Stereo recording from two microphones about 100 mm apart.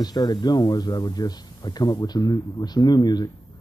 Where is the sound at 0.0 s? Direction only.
40° left (ahead or behind).